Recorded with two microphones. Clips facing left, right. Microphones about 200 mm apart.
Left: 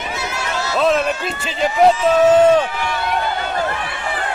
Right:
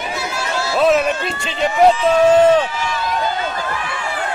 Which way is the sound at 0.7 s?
5° right (ahead or behind).